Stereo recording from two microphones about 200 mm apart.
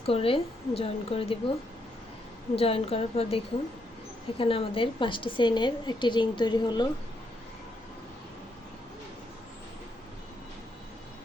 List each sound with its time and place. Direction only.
0.0 s a woman's voice: 30° left (ahead or behind)
2.6 s a woman's voice: 30° left (ahead or behind)